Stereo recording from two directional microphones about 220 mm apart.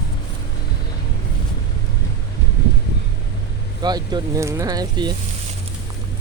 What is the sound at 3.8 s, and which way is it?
Speech, 20° right (ahead or behind).